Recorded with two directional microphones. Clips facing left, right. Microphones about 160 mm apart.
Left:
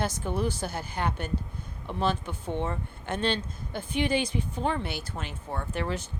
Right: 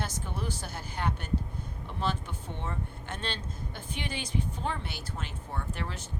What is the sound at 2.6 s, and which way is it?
Speech, 75° left (ahead or behind).